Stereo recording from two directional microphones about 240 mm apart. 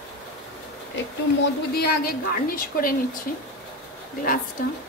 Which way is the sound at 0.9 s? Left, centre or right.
Left.